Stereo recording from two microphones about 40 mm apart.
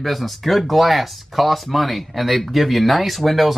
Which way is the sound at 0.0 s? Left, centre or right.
Centre.